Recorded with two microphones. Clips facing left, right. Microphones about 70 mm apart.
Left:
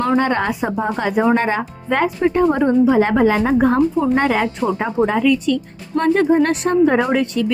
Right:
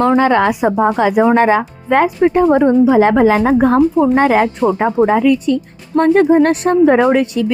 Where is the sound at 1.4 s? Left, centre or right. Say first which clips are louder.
Right 8 dB; right.